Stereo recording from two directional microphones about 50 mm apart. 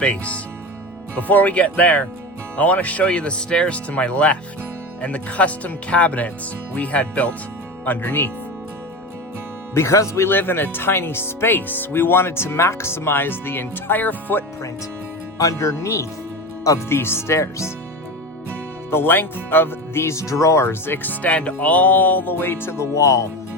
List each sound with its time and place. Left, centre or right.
0.0 s speech: left
3.1 s speech: centre
7.9 s speech: left
9.7 s speech: left
10.2 s speech: left
15.4 s speech: left
16.9 s speech: left
18.9 s speech: left
20.7 s speech: left